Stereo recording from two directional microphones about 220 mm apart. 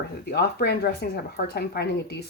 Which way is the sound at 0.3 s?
50° left (ahead or behind).